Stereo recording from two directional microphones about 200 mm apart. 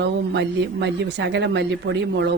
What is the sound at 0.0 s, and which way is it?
Speech, 60° right (ahead or behind).